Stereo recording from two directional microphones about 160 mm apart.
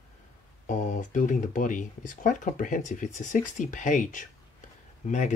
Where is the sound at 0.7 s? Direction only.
50° left (ahead or behind).